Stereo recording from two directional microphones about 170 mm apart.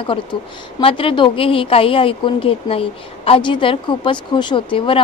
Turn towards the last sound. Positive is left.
turn(degrees=30)  # may be behind; listen again after turning